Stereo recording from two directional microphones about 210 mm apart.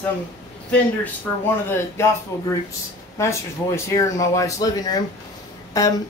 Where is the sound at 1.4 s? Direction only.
10° left (ahead or behind).